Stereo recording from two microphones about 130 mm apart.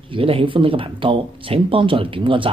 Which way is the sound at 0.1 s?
45° right (ahead or behind).